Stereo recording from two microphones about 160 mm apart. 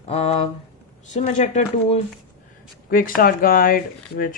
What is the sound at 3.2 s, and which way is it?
Speech, 65° left (ahead or behind).